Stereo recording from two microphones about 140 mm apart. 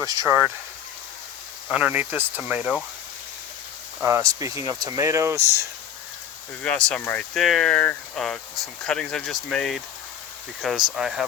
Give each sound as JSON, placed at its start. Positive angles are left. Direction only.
{"t": 0.0, "sound": "speech", "side_deg": -25}
{"t": 0.3, "sound": "speech", "side_deg": -10}
{"t": 1.7, "sound": "speech", "side_deg": -10}
{"t": 4.0, "sound": "speech", "side_deg": -20}
{"t": 6.6, "sound": "speech", "side_deg": 5}
{"t": 7.3, "sound": "speech", "side_deg": 0}